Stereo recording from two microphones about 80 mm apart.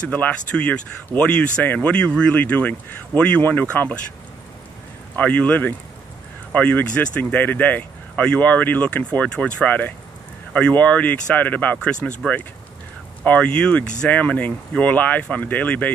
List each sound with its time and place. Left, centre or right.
0.0 s speech: centre
5.1 s speech: centre
13.2 s speech: centre